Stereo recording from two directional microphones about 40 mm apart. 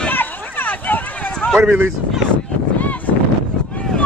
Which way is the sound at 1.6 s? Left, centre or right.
Right.